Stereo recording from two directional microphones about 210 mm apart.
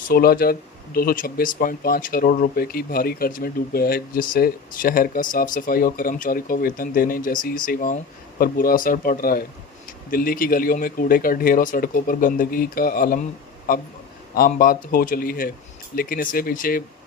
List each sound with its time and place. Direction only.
0.1 s speech: 45° left (ahead or behind)
14.3 s speech: 45° left (ahead or behind)